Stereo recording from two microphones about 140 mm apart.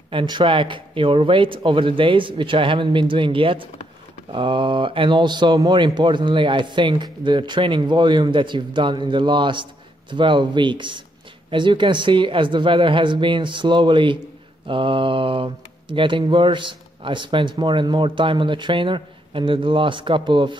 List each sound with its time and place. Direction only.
0.1 s speech: 35° right (ahead or behind)